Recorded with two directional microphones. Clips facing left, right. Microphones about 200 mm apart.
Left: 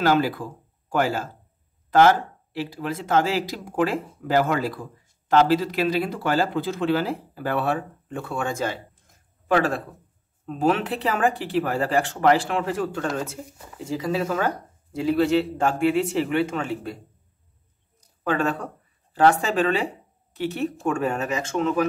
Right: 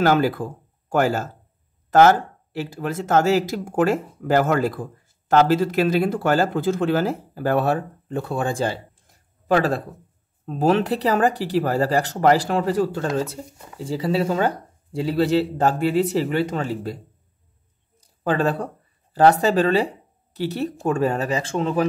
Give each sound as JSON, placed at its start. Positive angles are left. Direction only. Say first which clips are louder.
{"t": 0.0, "sound": "speech", "louder": "right 3 dB", "side_deg": -50}
{"t": 18.0, "sound": "speech", "louder": "right 3 dB", "side_deg": -35}